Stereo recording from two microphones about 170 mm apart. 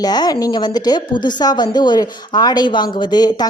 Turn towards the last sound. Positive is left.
turn(degrees=25)  # may be behind; listen again after turning